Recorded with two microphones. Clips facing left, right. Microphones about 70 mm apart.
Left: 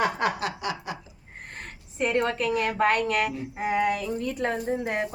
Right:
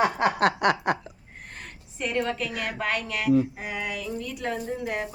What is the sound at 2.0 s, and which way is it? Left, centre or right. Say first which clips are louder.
A woman's voice: left 3 dB; left.